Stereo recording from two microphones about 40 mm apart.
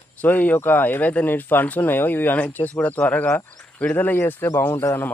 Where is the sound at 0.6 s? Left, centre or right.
Left.